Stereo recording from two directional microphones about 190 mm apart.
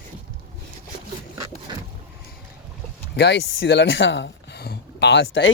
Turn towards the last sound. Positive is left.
turn(degrees=65)  # may be behind; listen again after turning